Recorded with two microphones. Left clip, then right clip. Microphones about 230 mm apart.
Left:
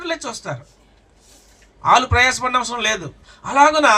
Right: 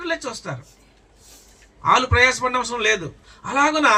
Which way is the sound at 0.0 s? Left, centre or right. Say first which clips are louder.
Left 1 dB; left.